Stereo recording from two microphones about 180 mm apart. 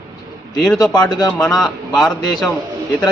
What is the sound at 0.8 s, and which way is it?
Speech, 20° left (ahead or behind).